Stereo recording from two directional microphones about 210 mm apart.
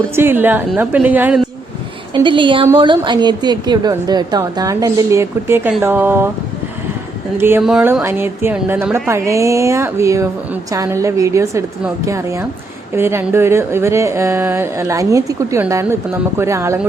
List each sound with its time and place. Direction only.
0.2 s a woman's voice: 10° right (ahead or behind)
2.1 s a woman's voice: 25° right (ahead or behind)
7.3 s a woman's voice: 10° right (ahead or behind)